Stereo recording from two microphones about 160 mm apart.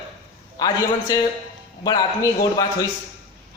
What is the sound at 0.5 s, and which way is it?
A man's voice, 25° left (ahead or behind).